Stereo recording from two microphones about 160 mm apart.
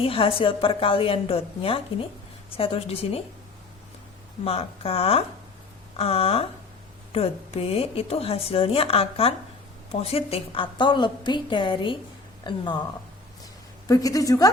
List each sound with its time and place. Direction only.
0.0 s speech: 35° left (ahead or behind)
4.4 s a woman's voice: 35° left (ahead or behind)
13.8 s a woman's voice: 20° left (ahead or behind)